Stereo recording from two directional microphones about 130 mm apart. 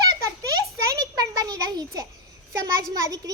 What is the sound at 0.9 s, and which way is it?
Child singing, 30° right (ahead or behind).